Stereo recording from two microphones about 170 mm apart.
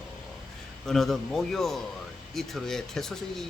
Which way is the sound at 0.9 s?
Centre (ahead or behind).